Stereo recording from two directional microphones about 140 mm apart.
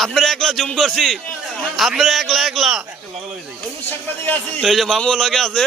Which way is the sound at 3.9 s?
15° left (ahead or behind).